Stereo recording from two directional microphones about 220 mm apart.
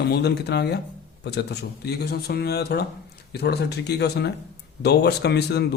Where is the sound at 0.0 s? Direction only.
50° left (ahead or behind).